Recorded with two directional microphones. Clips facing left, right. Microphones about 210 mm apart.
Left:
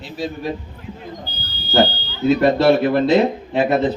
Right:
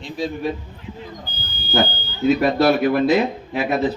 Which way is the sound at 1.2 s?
50° right (ahead or behind).